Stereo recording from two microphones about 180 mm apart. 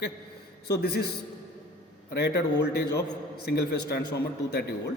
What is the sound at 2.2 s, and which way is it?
A man's voice, 65° left (ahead or behind).